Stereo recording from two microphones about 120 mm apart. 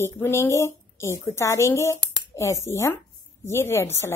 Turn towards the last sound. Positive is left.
turn(degrees=20)  # may be behind; listen again after turning